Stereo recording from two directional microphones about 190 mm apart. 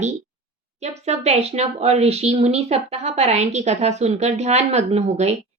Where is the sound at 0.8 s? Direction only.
35° right (ahead or behind).